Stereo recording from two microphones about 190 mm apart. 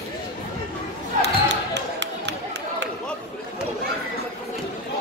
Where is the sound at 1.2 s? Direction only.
65° right (ahead or behind).